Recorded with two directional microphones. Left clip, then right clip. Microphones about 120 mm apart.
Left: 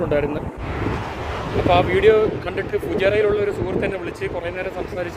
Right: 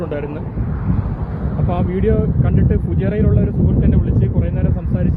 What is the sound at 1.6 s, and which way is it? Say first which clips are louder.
Speech: left 6 dB; 40° left (ahead or behind).